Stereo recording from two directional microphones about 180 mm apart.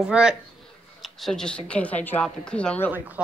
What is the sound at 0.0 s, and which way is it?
A woman's voice, 5° right (ahead or behind).